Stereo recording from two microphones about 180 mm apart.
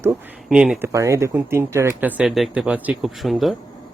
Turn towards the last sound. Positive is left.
turn(degrees=0)  # may be behind; listen again after turning